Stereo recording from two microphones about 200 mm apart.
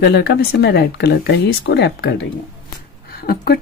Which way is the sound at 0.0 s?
55° left (ahead or behind).